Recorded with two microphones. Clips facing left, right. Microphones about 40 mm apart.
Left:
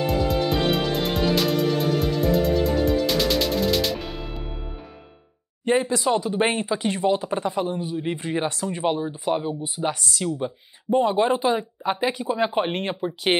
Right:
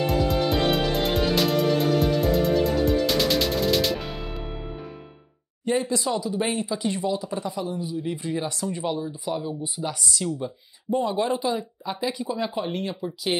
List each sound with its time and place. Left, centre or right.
0.0 s music: centre
5.8 s speech: left